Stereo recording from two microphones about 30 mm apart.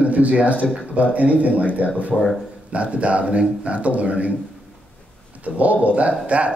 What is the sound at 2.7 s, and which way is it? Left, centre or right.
Speech, right.